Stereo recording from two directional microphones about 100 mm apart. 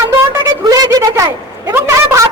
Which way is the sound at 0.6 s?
40° right (ahead or behind).